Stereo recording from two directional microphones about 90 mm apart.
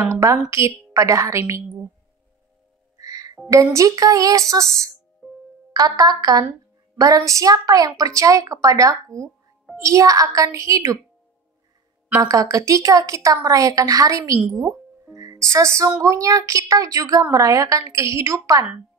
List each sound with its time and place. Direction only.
0.1 s a woman's voice: 35° right (ahead or behind)
3.0 s music: 45° right (ahead or behind)
3.4 s a woman's voice: 35° right (ahead or behind)
5.2 s music: 5° left (ahead or behind)
5.7 s a woman's voice: 45° right (ahead or behind)
12.2 s a woman's voice: 40° right (ahead or behind)
15.4 s a woman's voice: 35° right (ahead or behind)